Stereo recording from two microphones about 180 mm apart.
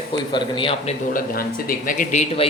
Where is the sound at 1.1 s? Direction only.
50° left (ahead or behind).